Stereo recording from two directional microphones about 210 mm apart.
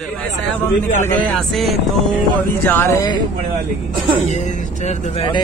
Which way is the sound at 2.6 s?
10° left (ahead or behind).